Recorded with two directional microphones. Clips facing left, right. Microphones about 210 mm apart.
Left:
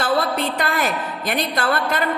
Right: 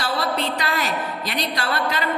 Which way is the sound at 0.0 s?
50° left (ahead or behind).